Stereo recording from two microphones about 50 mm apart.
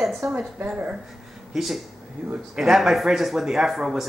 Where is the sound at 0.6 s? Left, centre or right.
Right.